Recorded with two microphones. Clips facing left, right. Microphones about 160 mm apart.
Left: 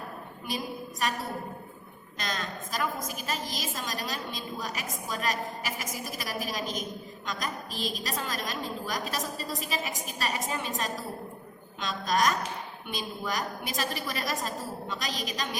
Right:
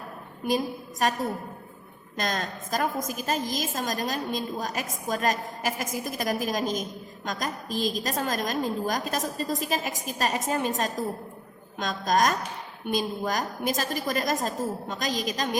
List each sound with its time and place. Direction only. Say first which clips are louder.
0.4 s a woman's voice: right 8 dB; 45° right (ahead or behind)
2.1 s a woman's voice: right 5 dB; 50° right (ahead or behind)